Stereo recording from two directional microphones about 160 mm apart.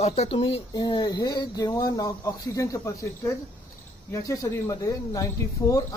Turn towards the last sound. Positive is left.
turn(degrees=20)  # may be behind; listen again after turning